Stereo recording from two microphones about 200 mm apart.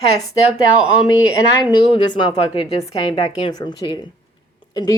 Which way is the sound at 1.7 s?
25° left (ahead or behind).